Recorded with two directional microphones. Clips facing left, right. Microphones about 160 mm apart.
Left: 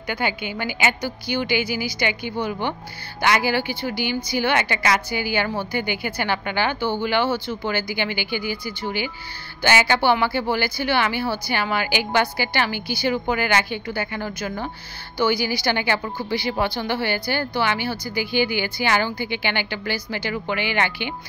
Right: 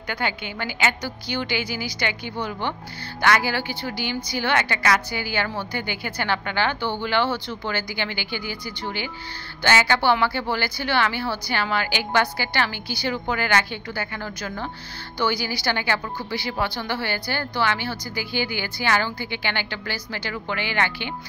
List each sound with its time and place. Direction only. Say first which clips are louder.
0.1 s speech: left 3 dB; 10° left (ahead or behind)